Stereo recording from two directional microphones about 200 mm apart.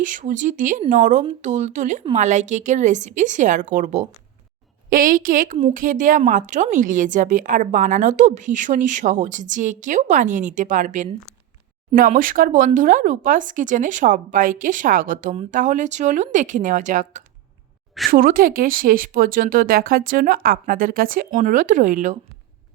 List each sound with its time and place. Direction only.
0.0 s a woman's voice: 40° right (ahead or behind)